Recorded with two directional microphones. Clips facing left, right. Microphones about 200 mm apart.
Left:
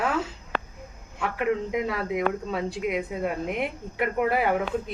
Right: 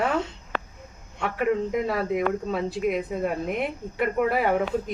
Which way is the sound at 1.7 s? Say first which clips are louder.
Right 2 dB; 50° right (ahead or behind).